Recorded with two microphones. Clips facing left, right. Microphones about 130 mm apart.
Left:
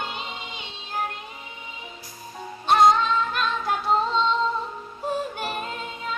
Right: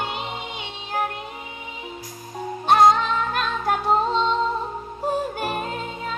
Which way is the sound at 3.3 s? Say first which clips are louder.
Right 2 dB; 50° right (ahead or behind).